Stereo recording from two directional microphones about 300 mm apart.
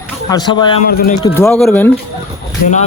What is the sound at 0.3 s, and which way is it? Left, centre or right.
Speech, centre.